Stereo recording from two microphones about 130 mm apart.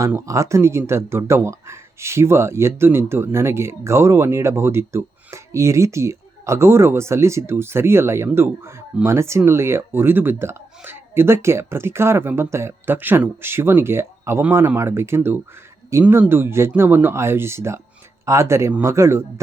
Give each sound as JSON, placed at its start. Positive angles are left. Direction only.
{"t": 0.0, "sound": "speech", "side_deg": -25}